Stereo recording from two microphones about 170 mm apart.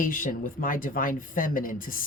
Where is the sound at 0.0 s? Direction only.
50° left (ahead or behind).